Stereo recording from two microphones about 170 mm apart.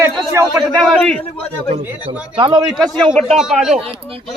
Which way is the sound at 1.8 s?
10° right (ahead or behind).